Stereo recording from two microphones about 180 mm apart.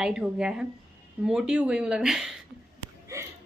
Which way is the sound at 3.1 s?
15° right (ahead or behind).